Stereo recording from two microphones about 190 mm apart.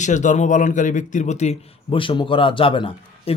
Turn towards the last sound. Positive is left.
turn(degrees=25)  # may be behind; listen again after turning